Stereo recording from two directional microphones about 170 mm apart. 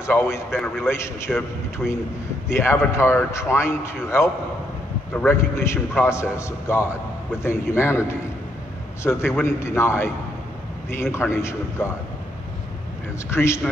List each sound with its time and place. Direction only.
0.0 s a man's voice: 15° left (ahead or behind)
9.0 s a man's voice: 15° left (ahead or behind)
13.3 s a man's voice: 15° left (ahead or behind)